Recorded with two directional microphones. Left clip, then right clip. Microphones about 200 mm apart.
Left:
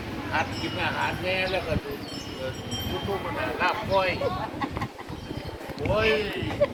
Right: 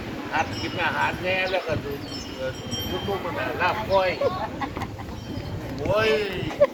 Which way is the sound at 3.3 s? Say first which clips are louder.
Right 1 dB; 45° right (ahead or behind).